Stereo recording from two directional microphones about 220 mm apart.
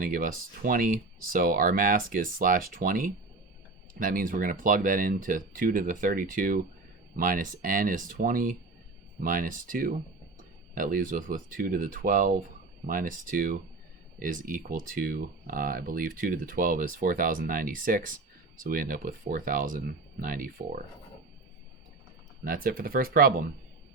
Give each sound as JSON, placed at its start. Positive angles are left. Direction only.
{"t": 0.0, "sound": "speech", "side_deg": -40}
{"t": 22.4, "sound": "speech", "side_deg": -40}